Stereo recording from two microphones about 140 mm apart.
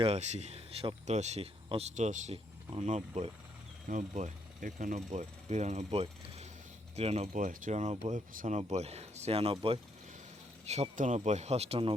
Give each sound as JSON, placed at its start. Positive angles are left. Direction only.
{"t": 0.0, "sound": "speech", "side_deg": -50}
{"t": 3.8, "sound": "speech", "side_deg": -65}
{"t": 7.3, "sound": "speech", "side_deg": -70}
{"t": 10.7, "sound": "speech", "side_deg": -55}